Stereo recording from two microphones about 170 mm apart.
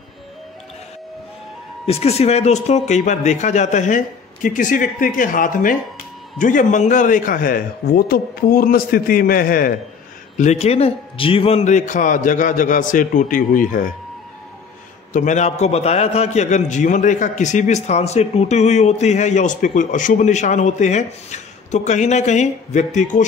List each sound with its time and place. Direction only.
1.9 s a man's voice: 35° left (ahead or behind); by 9.8 s 55° left (ahead or behind)
10.3 s a man's voice: 45° left (ahead or behind)
15.1 s a man's voice: 45° left (ahead or behind)